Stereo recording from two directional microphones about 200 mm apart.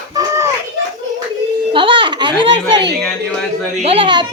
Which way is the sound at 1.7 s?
25° right (ahead or behind).